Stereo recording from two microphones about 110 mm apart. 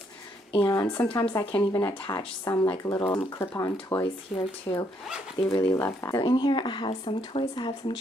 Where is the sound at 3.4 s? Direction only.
30° left (ahead or behind).